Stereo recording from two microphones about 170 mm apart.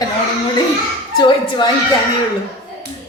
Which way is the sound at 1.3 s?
25° left (ahead or behind).